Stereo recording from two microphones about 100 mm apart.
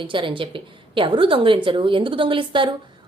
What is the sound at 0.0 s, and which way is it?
A woman's voice, 55° right (ahead or behind).